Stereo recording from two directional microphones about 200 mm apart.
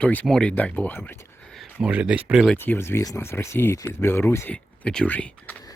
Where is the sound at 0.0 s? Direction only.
5° left (ahead or behind).